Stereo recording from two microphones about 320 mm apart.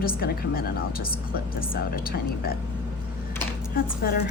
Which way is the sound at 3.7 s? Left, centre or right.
Left.